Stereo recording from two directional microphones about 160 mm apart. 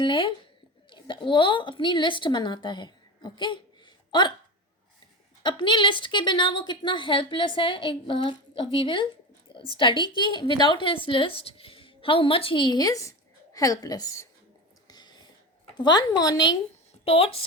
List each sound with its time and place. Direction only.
0.0 s a woman's voice: 30° left (ahead or behind)
5.4 s speech: 30° left (ahead or behind)
14.8 s a sound: 25° left (ahead or behind)
15.8 s a woman's voice: 25° left (ahead or behind)
17.1 s speech: 35° left (ahead or behind)